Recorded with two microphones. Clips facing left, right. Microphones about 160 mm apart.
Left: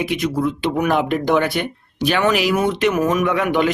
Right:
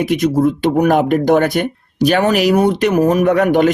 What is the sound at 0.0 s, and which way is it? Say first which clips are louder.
Speech: right 6 dB; 45° right (ahead or behind).